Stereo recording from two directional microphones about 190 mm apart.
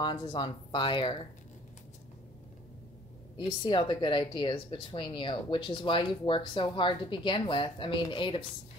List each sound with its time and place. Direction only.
0.0 s speech: 25° left (ahead or behind)
3.3 s speech: 25° left (ahead or behind)